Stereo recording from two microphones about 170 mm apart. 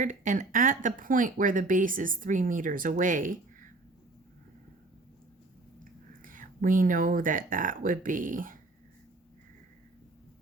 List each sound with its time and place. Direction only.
0.0 s speech: 50° right (ahead or behind)
6.2 s speech: 50° right (ahead or behind)